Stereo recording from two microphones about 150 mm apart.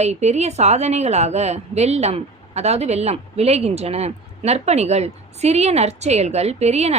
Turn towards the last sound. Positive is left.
turn(degrees=-45)  # may be behind; listen again after turning